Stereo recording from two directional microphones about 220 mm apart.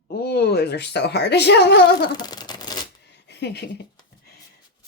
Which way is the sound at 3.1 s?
50° left (ahead or behind).